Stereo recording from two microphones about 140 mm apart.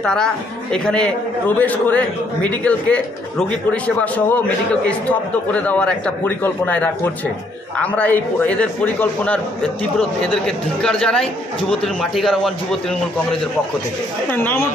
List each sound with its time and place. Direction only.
0.0 s a man's voice: 5° left (ahead or behind)
5.5 s a man's voice: 10° left (ahead or behind)
14.3 s a man's voice: 15° left (ahead or behind)